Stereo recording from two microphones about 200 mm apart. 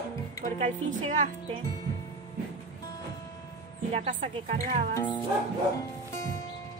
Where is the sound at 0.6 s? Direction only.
35° right (ahead or behind).